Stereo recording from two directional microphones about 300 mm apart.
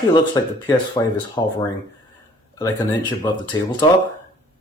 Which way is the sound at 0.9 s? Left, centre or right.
Centre.